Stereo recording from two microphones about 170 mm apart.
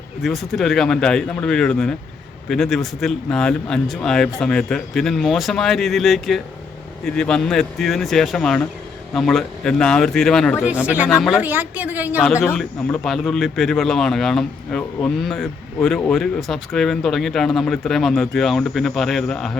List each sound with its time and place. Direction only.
0.2 s speech: centre (ahead or behind)
10.6 s a woman's voice: 10° right (ahead or behind)
11.4 s a woman's voice: 10° right (ahead or behind)
12.3 s a man's voice: 15° left (ahead or behind)
12.5 s speech: 5° left (ahead or behind)